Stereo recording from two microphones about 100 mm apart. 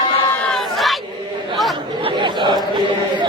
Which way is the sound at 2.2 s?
50° right (ahead or behind).